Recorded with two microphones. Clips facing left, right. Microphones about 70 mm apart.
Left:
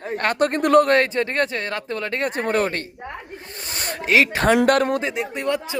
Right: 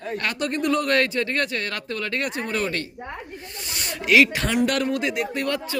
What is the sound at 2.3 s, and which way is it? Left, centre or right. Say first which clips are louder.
Speech: left 5 dB; left.